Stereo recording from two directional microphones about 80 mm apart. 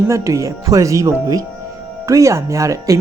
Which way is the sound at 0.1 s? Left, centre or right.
Right.